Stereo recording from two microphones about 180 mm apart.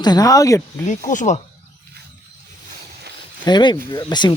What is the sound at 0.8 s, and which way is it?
Speech, 45° left (ahead or behind).